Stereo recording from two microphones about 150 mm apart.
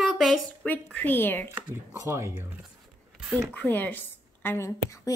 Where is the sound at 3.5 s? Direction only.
10° left (ahead or behind).